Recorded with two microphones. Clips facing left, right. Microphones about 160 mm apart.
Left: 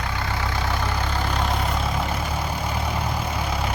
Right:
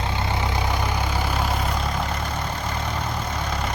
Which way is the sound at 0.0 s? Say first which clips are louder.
Right 2 dB; 20° right (ahead or behind).